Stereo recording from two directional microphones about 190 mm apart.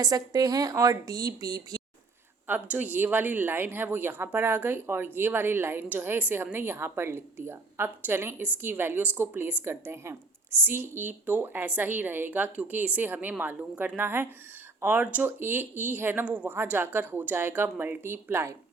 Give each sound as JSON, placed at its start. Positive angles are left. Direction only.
{"t": 0.0, "sound": "speech", "side_deg": -20}